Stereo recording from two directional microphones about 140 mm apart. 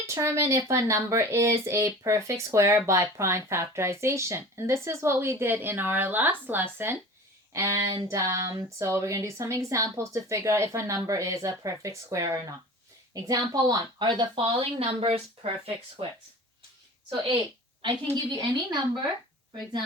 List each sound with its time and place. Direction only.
0.1 s speech: 20° right (ahead or behind); by 16.0 s 45° right (ahead or behind)
17.8 s speech: 30° right (ahead or behind)